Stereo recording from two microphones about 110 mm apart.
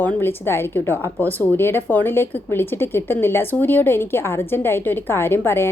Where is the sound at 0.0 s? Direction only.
20° left (ahead or behind).